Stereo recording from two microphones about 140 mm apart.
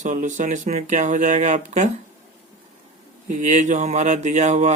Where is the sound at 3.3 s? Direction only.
60° right (ahead or behind).